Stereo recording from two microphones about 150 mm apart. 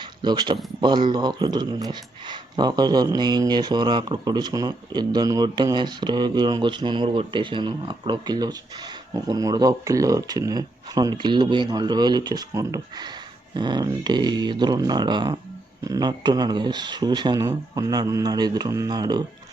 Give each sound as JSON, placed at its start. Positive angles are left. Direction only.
{"t": 0.2, "sound": "speech", "side_deg": -30}